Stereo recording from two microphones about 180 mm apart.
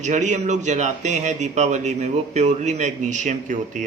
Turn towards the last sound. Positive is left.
turn(degrees=-45)  # may be behind; listen again after turning